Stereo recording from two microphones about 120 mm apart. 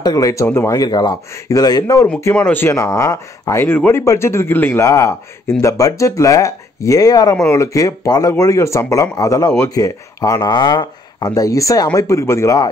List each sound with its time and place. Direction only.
0.0 s speech: 30° left (ahead or behind)
2.3 s speech: 15° left (ahead or behind)